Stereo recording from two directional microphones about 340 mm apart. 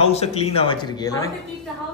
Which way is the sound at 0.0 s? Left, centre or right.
Centre.